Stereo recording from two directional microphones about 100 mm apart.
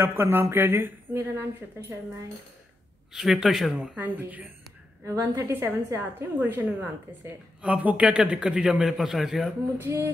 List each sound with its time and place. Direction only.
0.0 s a woman's voice: 20° right (ahead or behind)
3.1 s a man's voice: 5° right (ahead or behind)
5.0 s a woman's voice: 30° right (ahead or behind); by 9.5 s 5° right (ahead or behind)
9.8 s a woman's voice: 25° right (ahead or behind)